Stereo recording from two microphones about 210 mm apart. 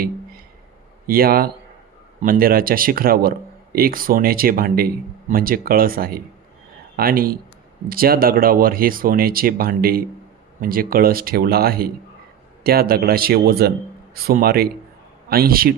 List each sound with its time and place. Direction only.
1.0 s speech: 45° right (ahead or behind)